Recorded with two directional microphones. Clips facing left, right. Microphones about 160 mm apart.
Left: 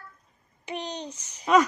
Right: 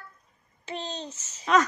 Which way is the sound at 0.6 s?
15° left (ahead or behind).